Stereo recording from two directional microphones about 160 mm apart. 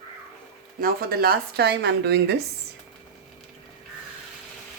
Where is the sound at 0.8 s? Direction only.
70° right (ahead or behind); by 2.3 s 90° right.